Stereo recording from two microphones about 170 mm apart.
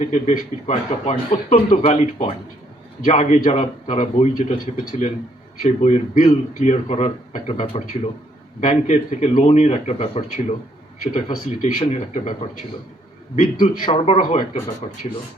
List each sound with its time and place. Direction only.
0.1 s speech: 40° left (ahead or behind)
3.1 s speech: 40° left (ahead or behind)
13.8 s speech: 35° left (ahead or behind)
14.2 s speech: 45° left (ahead or behind)